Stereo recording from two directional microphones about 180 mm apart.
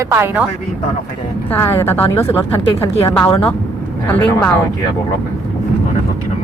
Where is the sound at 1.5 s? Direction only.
10° left (ahead or behind).